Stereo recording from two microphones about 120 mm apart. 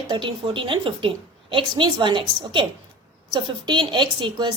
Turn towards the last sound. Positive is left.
turn(degrees=-40)  # may be behind; listen again after turning